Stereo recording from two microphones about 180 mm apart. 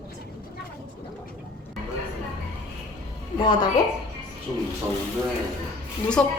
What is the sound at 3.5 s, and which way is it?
Speech, 25° left (ahead or behind).